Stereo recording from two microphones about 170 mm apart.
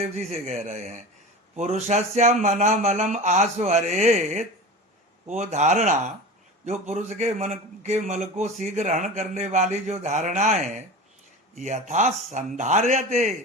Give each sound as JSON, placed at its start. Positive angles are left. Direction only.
{"t": 0.0, "sound": "a man's voice", "side_deg": -40}